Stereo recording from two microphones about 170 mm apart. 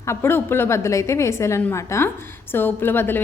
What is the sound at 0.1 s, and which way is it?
A woman's voice, 15° left (ahead or behind).